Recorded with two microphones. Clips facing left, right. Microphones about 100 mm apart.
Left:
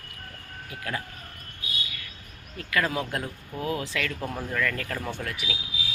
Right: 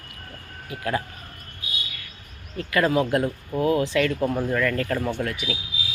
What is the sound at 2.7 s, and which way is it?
Speech, 5° right (ahead or behind).